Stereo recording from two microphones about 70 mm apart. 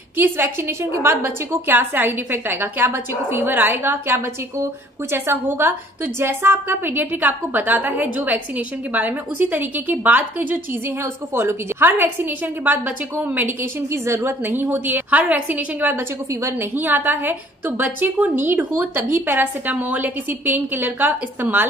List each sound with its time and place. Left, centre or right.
0.2 s a woman's voice: right
11.0 s a woman's voice: right
19.4 s a woman's voice: right